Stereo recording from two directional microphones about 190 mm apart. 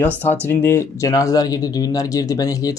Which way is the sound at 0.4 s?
10° left (ahead or behind).